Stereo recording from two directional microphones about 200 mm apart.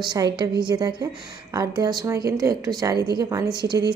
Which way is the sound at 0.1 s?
20° right (ahead or behind).